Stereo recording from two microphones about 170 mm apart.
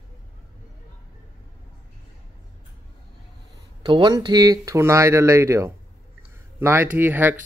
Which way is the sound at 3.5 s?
25° right (ahead or behind).